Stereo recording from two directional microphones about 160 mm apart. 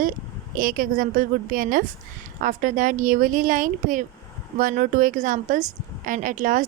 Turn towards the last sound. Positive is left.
turn(degrees=-55)  # may be behind; listen again after turning